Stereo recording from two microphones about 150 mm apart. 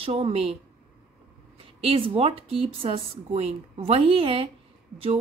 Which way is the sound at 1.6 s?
40° right (ahead or behind).